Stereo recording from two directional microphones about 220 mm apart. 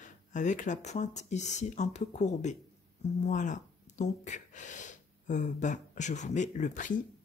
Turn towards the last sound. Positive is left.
turn(degrees=35)  # may be behind; listen again after turning